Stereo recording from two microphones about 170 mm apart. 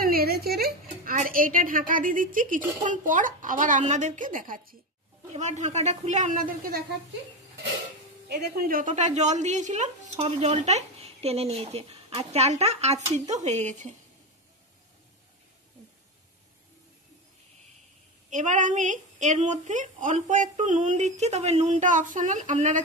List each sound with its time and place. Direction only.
0.0 s music: 65° right (ahead or behind)
2.8 s a woman's voice: 50° right (ahead or behind)
5.3 s a woman's voice: 45° right (ahead or behind)
8.3 s a woman's voice: 70° right (ahead or behind); by 13.9 s 45° right (ahead or behind)
18.3 s a woman's voice: 45° right (ahead or behind)